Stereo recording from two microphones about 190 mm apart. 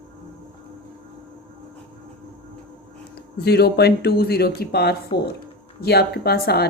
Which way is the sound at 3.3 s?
55° left (ahead or behind).